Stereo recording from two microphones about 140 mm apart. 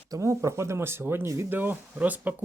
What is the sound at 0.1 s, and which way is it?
Speech, 20° right (ahead or behind).